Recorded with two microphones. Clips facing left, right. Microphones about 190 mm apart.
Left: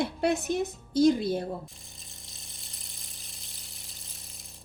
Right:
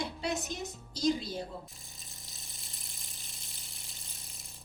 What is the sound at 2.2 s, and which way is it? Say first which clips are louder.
Pump: left 2 dB; centre (ahead or behind).